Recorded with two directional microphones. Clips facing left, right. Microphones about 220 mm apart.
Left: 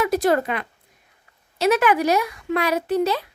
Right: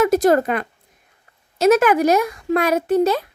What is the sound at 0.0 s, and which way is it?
Speech, 45° right (ahead or behind).